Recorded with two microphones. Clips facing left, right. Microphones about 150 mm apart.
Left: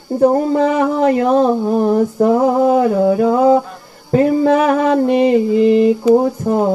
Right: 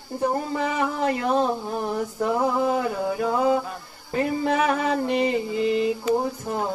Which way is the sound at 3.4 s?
40° left (ahead or behind).